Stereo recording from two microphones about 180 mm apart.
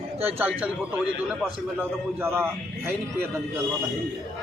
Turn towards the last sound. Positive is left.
turn(degrees=-10)  # may be behind; listen again after turning